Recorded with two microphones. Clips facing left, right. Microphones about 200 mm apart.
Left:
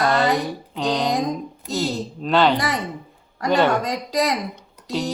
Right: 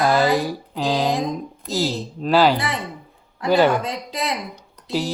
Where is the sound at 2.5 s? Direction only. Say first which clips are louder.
Left 2 dB; 40° left (ahead or behind).